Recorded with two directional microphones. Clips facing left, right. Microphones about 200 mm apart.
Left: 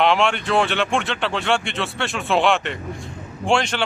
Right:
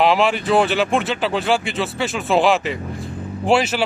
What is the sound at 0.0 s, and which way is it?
Speech, centre (ahead or behind).